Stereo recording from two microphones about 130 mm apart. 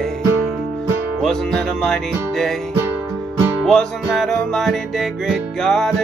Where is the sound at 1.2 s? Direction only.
5° left (ahead or behind).